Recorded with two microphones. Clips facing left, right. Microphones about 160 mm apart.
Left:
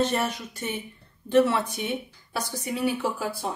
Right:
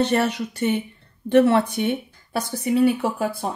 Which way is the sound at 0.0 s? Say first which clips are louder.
Right 5 dB; 70° right (ahead or behind).